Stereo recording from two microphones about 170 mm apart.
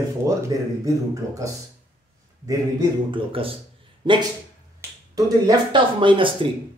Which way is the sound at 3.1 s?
35° right (ahead or behind).